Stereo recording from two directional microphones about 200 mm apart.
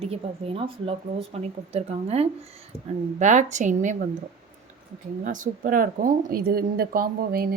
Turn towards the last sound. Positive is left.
turn(degrees=-45)  # may be behind; listen again after turning